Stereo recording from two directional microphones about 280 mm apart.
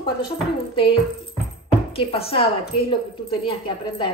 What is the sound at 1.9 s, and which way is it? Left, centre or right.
Speech, centre.